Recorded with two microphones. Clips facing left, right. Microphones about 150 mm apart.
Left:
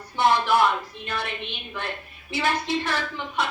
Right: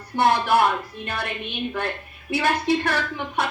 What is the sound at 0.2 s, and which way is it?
Speech, 55° right (ahead or behind).